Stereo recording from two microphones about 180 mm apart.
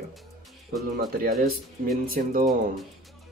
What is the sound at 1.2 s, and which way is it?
Speech, 55° right (ahead or behind).